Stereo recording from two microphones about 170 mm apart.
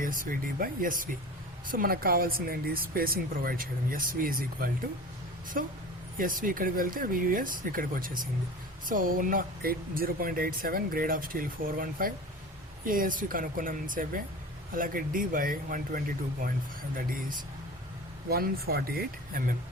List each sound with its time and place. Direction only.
0.0 s speech: 55° right (ahead or behind)